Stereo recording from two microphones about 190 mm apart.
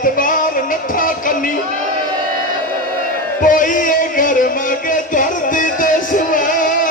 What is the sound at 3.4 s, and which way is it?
Music, 45° left (ahead or behind).